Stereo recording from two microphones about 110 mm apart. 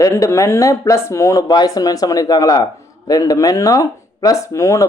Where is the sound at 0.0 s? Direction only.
30° left (ahead or behind).